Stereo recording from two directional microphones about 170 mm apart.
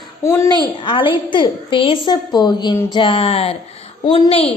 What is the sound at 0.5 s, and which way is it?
A child's voice, 30° left (ahead or behind).